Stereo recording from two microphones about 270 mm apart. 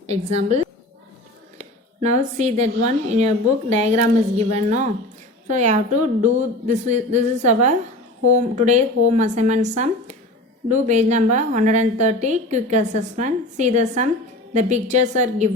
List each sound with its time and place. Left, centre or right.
0.1 s a woman's voice: right